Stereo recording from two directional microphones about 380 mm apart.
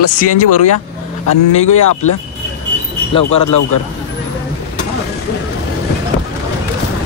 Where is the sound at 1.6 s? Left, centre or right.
Left.